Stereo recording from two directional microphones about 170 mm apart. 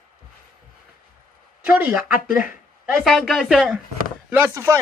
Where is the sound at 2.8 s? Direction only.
Centre (ahead or behind).